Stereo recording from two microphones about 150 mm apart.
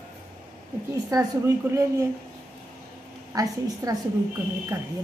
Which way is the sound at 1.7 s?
20° right (ahead or behind).